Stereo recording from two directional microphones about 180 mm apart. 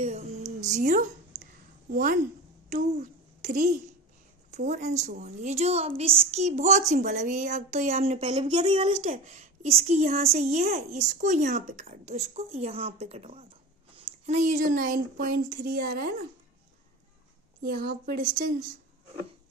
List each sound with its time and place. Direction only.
0.0 s speech: 40° right (ahead or behind)
2.6 s a child's voice: 50° right (ahead or behind)
17.6 s a woman's voice: 55° right (ahead or behind)